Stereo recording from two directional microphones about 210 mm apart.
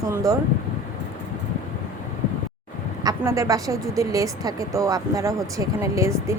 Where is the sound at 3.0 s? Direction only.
15° right (ahead or behind).